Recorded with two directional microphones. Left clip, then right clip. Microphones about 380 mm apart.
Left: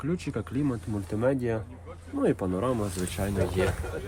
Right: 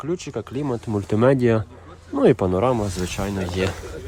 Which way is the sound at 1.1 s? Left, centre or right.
Right.